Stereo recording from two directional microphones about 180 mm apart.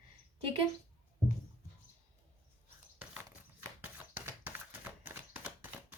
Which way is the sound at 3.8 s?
10° right (ahead or behind).